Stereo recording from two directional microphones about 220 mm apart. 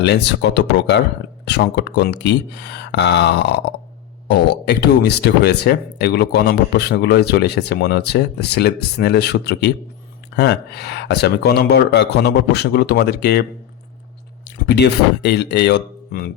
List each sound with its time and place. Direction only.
0.0 s speech: 50° left (ahead or behind)
14.4 s speech: 50° left (ahead or behind)